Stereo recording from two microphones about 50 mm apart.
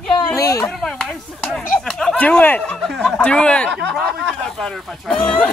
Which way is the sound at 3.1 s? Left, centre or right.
Left.